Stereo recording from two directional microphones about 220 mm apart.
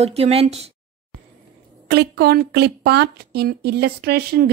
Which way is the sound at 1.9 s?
45° right (ahead or behind).